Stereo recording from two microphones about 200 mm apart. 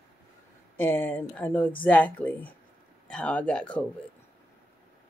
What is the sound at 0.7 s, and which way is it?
Speech, 10° left (ahead or behind).